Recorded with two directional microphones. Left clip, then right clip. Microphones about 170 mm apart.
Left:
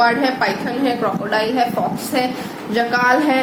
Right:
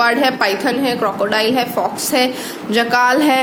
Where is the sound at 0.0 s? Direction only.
40° right (ahead or behind).